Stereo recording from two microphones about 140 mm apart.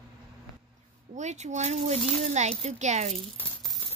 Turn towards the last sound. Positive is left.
turn(degrees=15)  # may be behind; listen again after turning